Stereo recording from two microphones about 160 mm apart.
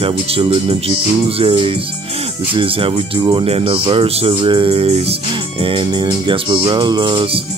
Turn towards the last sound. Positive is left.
turn(degrees=-35)  # may be behind; listen again after turning